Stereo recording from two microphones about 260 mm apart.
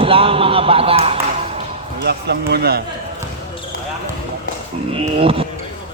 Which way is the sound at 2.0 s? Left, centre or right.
Right.